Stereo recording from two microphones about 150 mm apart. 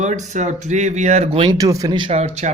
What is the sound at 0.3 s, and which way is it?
Speech, 50° right (ahead or behind).